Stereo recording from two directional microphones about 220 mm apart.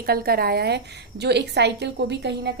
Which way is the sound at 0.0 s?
45° right (ahead or behind).